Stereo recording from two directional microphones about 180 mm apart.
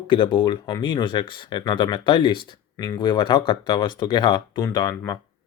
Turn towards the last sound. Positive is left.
turn(degrees=20)  # may be behind; listen again after turning